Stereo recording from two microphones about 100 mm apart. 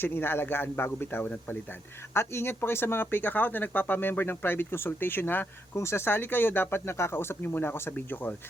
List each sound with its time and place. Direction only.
0.0 s speech: 20° left (ahead or behind)